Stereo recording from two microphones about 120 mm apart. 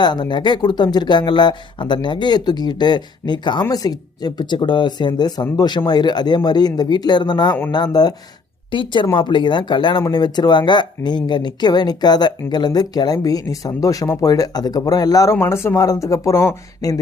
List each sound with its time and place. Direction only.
0.0 s speech: 35° left (ahead or behind)